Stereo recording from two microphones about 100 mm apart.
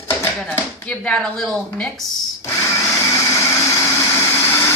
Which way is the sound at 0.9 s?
5° left (ahead or behind).